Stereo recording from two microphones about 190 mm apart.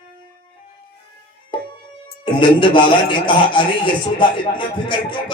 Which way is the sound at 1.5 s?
25° left (ahead or behind).